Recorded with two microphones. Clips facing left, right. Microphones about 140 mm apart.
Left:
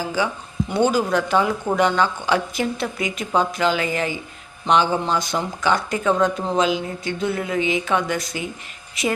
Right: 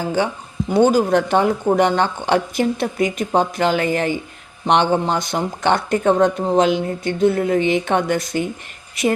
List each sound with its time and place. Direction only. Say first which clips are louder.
0.0 s speech: right 3 dB; 50° right (ahead or behind)